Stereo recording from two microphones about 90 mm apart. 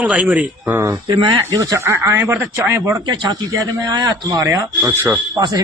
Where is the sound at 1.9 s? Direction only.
30° right (ahead or behind).